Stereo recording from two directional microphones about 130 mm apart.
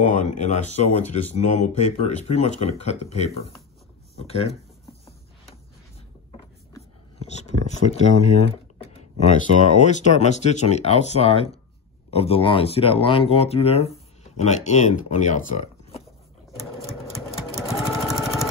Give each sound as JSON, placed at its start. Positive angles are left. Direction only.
{"t": 0.0, "sound": "speech", "side_deg": 70}
{"t": 7.2, "sound": "speech", "side_deg": 60}
{"t": 17.7, "sound": "sewing machine", "side_deg": 0}